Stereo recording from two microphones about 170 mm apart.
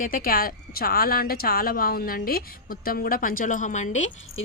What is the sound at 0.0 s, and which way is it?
A woman's voice, 55° left (ahead or behind).